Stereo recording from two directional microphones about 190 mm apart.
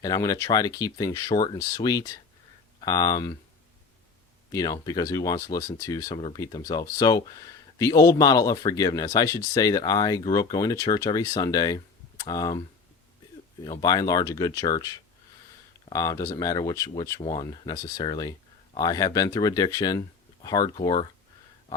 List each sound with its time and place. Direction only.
0.0 s speech: 20° left (ahead or behind)
4.5 s speech: 20° left (ahead or behind)
6.1 s speech: 30° left (ahead or behind)
6.4 s speech: 20° left (ahead or behind)
13.7 s speech: 20° left (ahead or behind)